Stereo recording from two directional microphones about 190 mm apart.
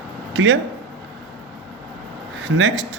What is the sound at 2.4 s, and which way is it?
Speech, 85° right.